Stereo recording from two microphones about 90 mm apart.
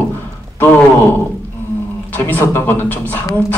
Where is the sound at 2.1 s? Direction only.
20° left (ahead or behind).